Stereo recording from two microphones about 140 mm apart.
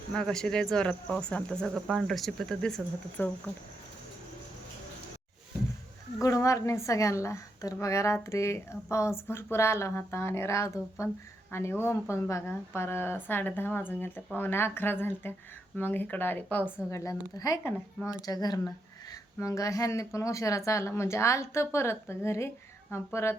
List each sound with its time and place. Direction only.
0.1 s speech: 5° left (ahead or behind)
6.2 s a woman's voice: 20° left (ahead or behind)
18.3 s a woman's voice: 30° left (ahead or behind)